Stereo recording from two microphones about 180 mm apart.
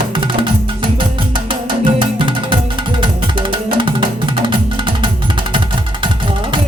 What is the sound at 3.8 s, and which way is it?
Music, 25° right (ahead or behind).